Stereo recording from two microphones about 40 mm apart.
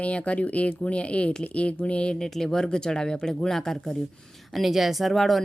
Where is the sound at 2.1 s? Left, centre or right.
Centre.